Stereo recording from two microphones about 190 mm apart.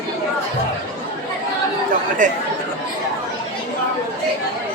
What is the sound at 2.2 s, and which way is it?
Speech, 40° right (ahead or behind).